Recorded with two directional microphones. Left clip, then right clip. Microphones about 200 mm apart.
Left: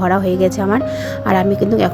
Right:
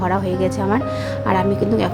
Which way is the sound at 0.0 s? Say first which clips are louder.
Left 5 dB; 20° left (ahead or behind).